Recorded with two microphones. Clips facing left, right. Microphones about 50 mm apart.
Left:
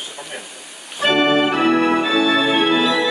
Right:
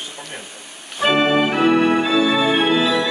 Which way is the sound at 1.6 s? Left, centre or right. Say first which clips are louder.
Even; centre.